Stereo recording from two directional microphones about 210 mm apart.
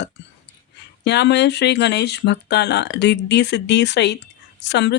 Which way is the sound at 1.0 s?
55° left (ahead or behind).